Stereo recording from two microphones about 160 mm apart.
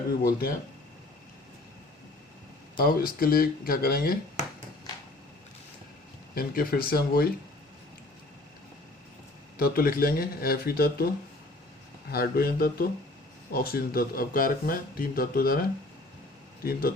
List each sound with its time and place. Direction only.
0.2 s speech: 70° left (ahead or behind)
2.7 s speech: 65° left (ahead or behind)
6.3 s speech: 70° left (ahead or behind)
9.6 s speech: 65° left (ahead or behind)
12.1 s speech: 70° left (ahead or behind)